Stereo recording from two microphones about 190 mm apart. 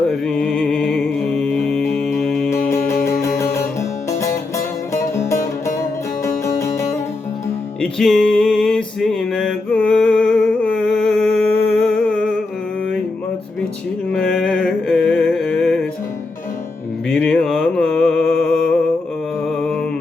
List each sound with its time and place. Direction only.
0.3 s music: 5° left (ahead or behind)
2.5 s music: 15° left (ahead or behind)
4.2 s music: 15° left (ahead or behind)
7.8 s music: 5° left (ahead or behind)
14.1 s a sound: centre (ahead or behind)
17.1 s mantra: 5° left (ahead or behind)